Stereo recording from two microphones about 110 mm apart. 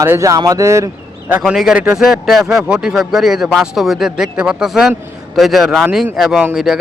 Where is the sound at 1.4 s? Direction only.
5° right (ahead or behind).